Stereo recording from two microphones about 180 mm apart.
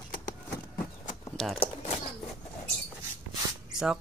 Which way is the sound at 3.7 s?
5° right (ahead or behind).